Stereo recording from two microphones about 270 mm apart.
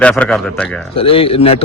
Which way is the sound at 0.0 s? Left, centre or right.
Centre.